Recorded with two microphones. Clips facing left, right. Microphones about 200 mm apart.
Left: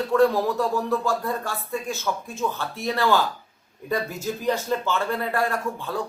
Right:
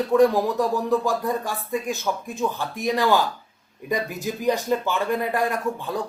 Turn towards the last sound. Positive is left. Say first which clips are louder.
# right 2 dB
turn(degrees=-15)  # may be behind; listen again after turning